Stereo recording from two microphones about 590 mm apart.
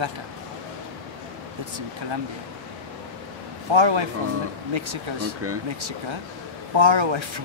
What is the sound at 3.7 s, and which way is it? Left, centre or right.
Speech, right.